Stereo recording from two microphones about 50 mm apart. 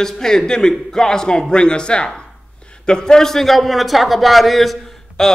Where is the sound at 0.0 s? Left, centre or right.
Centre.